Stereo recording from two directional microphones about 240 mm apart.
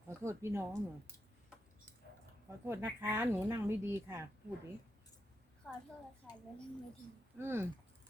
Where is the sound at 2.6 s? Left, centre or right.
Centre.